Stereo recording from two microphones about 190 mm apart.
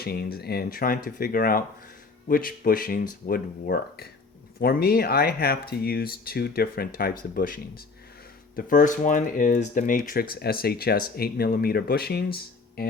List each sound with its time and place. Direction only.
0.0 s speech: 55° left (ahead or behind)